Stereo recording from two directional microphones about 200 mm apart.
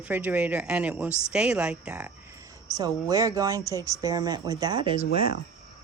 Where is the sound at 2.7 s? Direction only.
15° right (ahead or behind).